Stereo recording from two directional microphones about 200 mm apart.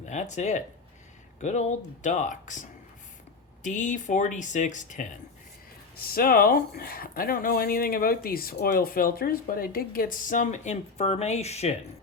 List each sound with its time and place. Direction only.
0.0 s speech: 35° left (ahead or behind)